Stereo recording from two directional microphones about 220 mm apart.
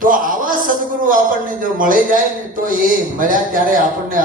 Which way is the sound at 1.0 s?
40° right (ahead or behind).